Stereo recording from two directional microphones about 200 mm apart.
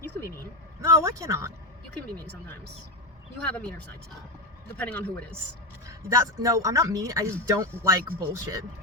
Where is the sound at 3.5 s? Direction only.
5° left (ahead or behind).